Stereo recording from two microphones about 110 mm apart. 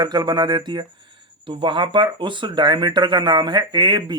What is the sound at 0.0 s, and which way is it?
Speech, 40° right (ahead or behind).